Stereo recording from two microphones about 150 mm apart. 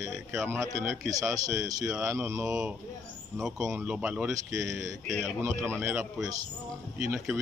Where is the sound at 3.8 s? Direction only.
10° right (ahead or behind).